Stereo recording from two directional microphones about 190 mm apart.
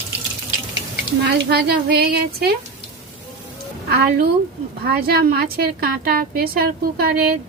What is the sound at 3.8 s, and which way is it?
A woman's voice, 55° right (ahead or behind).